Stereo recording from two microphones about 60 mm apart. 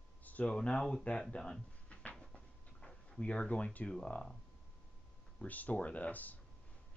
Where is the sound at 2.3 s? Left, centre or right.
Centre.